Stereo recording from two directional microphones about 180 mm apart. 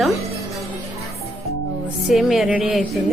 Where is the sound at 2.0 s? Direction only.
Centre (ahead or behind).